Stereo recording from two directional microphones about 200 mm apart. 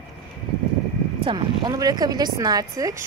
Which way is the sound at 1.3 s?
20° right (ahead or behind).